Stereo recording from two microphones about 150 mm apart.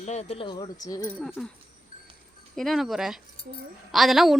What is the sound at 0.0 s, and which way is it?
Speech, 50° left (ahead or behind).